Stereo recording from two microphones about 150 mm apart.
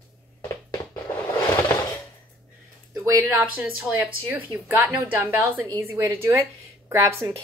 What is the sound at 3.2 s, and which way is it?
A woman's voice, 20° right (ahead or behind).